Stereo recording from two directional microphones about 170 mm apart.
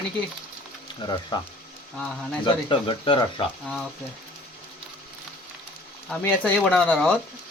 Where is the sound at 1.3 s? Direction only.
25° left (ahead or behind).